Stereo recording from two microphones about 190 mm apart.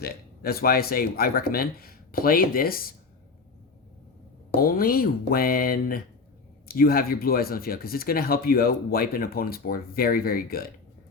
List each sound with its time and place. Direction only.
0.0 s speech: 55° left (ahead or behind)
4.5 s speech: 50° left (ahead or behind)